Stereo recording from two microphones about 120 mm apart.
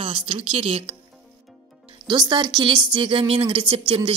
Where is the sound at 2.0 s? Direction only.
35° right (ahead or behind).